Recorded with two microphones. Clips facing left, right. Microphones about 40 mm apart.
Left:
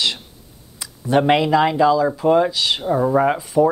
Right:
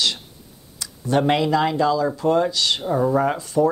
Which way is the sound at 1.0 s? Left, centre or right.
Centre.